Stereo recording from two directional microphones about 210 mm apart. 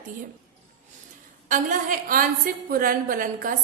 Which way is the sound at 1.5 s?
35° right (ahead or behind).